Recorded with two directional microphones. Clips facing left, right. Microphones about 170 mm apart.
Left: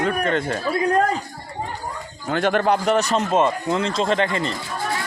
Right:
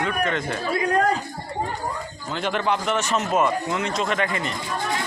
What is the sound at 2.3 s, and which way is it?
Speech, 50° left (ahead or behind).